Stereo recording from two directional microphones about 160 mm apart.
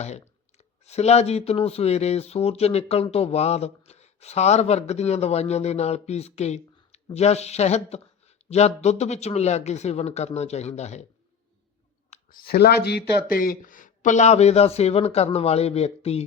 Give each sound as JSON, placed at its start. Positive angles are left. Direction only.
{"t": 0.9, "sound": "speech", "side_deg": 40}
{"t": 12.1, "sound": "speech", "side_deg": 65}